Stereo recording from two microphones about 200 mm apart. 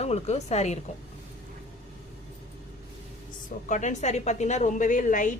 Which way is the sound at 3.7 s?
35° left (ahead or behind).